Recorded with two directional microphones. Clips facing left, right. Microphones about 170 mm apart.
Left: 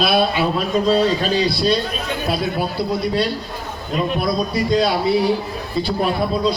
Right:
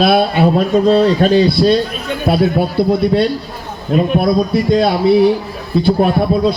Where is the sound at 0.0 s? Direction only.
55° right (ahead or behind).